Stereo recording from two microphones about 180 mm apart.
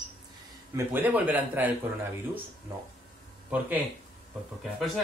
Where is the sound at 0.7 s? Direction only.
10° right (ahead or behind).